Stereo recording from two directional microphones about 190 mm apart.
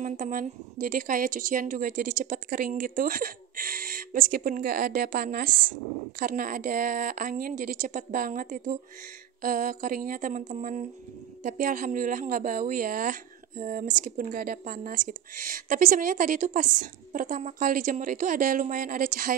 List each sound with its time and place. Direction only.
0.0 s a woman's voice: 45° right (ahead or behind)